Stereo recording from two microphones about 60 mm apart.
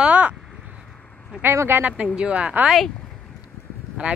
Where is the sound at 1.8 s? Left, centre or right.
Right.